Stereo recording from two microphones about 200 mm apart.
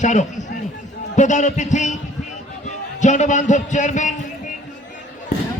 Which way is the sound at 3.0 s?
35° left (ahead or behind).